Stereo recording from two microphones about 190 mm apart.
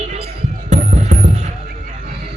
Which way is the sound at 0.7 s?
35° right (ahead or behind).